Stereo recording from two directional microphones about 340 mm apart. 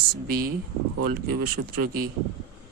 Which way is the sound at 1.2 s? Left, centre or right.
Right.